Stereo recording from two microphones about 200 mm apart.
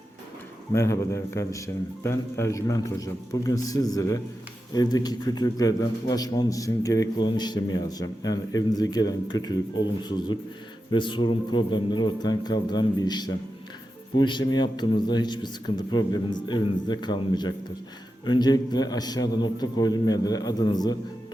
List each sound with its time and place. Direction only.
0.7 s a man's voice: 15° left (ahead or behind)